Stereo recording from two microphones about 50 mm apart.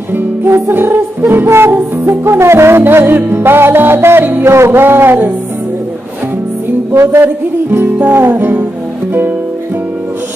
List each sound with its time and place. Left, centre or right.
0.1 s music: right
2.8 s music: right
4.5 s music: right
6.9 s music: right